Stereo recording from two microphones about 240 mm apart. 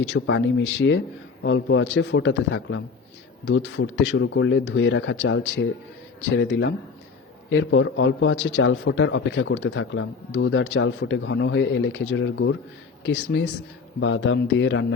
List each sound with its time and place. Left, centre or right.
0.1 s a man's voice: left